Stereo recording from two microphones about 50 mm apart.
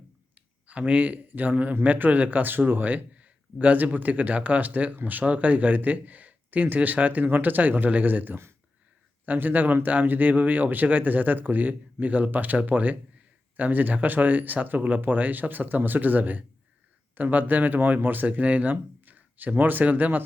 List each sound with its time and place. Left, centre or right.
0.3 s speech: right